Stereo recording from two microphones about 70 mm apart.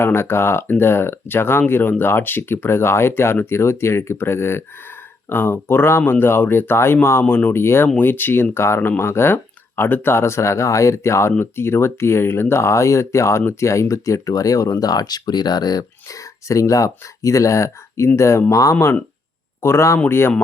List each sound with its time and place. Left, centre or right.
0.0 s speech: left
15.8 s speech: left